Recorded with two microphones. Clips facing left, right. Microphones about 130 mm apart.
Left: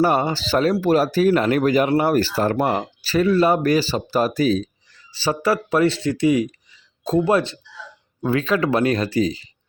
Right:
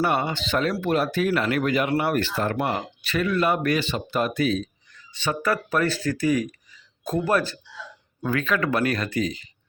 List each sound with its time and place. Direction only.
0.0 s speech: 30° left (ahead or behind)